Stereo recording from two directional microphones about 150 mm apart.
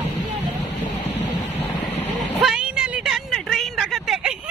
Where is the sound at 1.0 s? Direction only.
50° left (ahead or behind).